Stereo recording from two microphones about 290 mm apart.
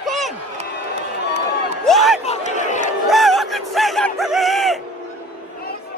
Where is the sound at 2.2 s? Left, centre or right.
Left.